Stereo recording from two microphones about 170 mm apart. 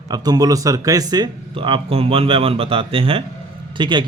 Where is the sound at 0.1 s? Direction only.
25° right (ahead or behind).